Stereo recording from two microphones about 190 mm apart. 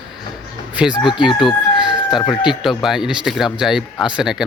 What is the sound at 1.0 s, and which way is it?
Speech, 25° left (ahead or behind).